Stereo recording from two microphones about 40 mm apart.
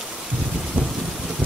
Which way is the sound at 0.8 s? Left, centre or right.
Right.